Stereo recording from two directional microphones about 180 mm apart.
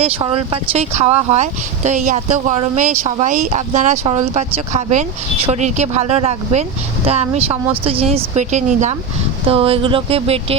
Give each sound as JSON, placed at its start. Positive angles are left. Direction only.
{"t": 0.0, "sound": "speech", "side_deg": -30}